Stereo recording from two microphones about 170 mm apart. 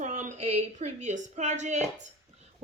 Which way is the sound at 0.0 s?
45° right (ahead or behind).